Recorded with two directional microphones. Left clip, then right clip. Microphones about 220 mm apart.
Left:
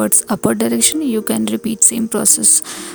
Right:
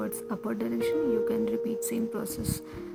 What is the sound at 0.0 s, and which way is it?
Speech, 50° left (ahead or behind).